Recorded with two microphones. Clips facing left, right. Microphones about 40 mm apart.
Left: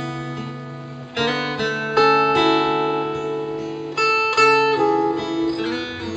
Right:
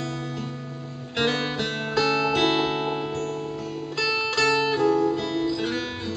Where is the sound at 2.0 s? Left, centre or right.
Centre.